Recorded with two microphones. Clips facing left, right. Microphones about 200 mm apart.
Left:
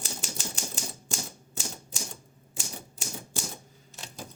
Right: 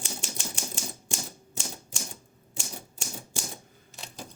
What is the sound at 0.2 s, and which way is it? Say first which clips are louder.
Typewriter: even; centre (ahead or behind).